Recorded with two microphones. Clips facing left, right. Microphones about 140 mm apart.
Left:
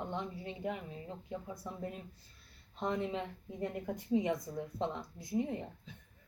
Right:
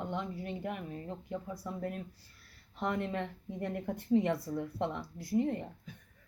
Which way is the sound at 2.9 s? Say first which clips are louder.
Left 1 dB; 15° left (ahead or behind).